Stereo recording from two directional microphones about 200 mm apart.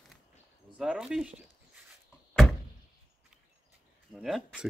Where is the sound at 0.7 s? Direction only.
5° right (ahead or behind).